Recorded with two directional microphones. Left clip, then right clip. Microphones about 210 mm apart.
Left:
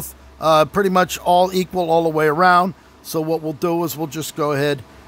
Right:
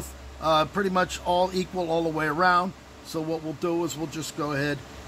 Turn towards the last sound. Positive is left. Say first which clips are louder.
# left 9 dB
turn(degrees=50)  # may be behind; listen again after turning